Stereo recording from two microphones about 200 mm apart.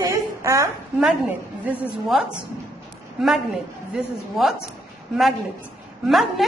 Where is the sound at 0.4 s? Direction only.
15° right (ahead or behind).